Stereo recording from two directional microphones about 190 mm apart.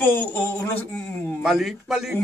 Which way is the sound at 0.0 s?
10° left (ahead or behind).